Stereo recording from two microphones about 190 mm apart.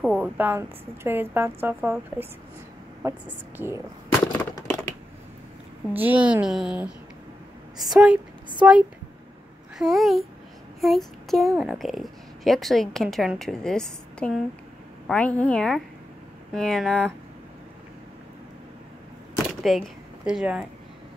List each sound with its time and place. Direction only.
0.0 s speech: 10° right (ahead or behind)
4.4 s a sound: 15° left (ahead or behind)
5.9 s a woman's voice: 10° right (ahead or behind)
19.6 s speech: centre (ahead or behind)